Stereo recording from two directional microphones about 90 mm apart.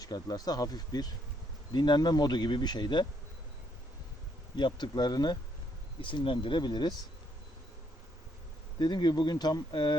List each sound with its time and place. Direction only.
0.0 s speech: 45° left (ahead or behind)
4.5 s speech: 55° left (ahead or behind)
6.0 s speech: 70° left (ahead or behind)
8.8 s speech: 55° left (ahead or behind)